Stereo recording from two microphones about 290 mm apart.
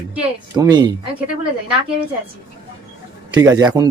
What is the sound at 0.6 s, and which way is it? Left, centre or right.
Speech, centre.